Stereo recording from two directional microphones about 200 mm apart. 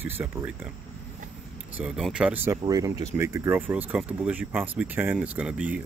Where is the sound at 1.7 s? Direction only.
5° right (ahead or behind).